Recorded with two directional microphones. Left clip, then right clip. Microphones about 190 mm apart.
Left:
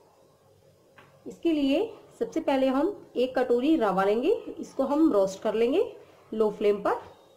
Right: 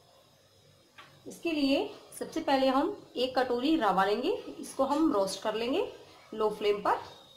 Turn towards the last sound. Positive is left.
turn(degrees=40)  # may be behind; listen again after turning